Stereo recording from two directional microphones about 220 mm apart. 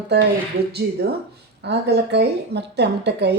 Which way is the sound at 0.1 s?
50° right (ahead or behind).